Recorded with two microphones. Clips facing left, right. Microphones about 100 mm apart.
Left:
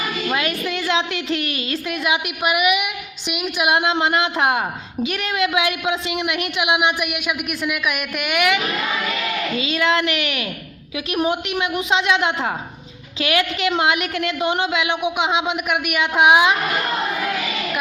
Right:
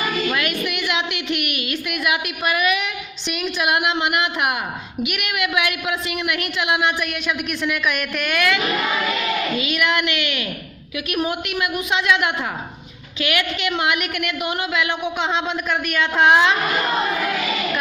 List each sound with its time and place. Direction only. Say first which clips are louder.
0.3 s a woman's voice: left 1 dB; 30° left (ahead or behind)
9.6 s a woman's voice: left 2 dB; 25° left (ahead or behind); by 16.6 s 10° left (ahead or behind)